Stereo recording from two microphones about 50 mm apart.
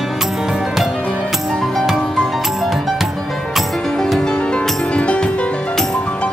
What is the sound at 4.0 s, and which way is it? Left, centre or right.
Music, centre.